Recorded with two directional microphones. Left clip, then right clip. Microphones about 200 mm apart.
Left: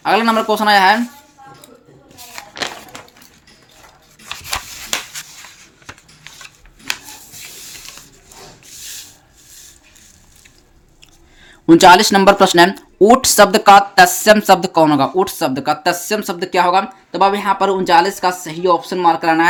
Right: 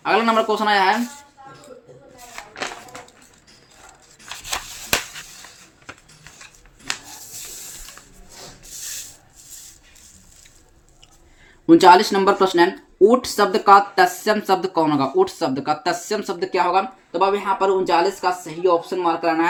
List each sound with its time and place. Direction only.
0.0 s speech: 25° left (ahead or behind)
2.3 s a sound: 50° left (ahead or behind)
11.6 s speech: 35° left (ahead or behind)